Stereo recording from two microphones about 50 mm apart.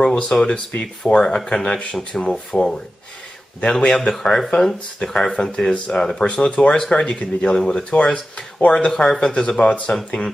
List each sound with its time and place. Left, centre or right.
0.0 s speech: centre
3.7 s speech: centre
6.2 s speech: left